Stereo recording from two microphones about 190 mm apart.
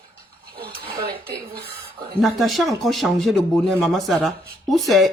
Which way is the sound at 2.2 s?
Centre (ahead or behind).